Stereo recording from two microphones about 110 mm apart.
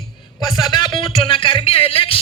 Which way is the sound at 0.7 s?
45° left (ahead or behind).